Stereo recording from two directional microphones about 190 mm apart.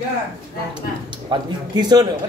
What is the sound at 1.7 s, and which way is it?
Speech, 20° right (ahead or behind).